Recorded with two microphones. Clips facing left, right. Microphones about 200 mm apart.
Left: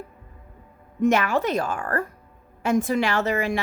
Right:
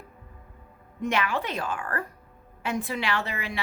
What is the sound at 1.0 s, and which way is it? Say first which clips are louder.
A woman's voice: left 7 dB; 45° left (ahead or behind).